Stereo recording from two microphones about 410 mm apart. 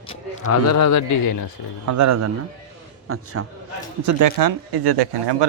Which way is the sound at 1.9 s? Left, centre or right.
Right.